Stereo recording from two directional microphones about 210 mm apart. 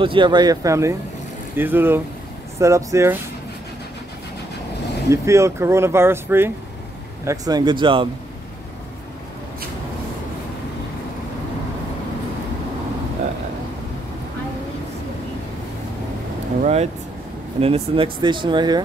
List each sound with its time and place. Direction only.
0.0 s speech: 25° right (ahead or behind)
5.1 s speech: 15° right (ahead or behind)
16.6 s speech: 30° right (ahead or behind)